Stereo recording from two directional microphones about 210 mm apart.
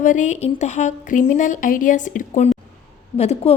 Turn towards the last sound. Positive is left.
turn(degrees=30)  # may be behind; listen again after turning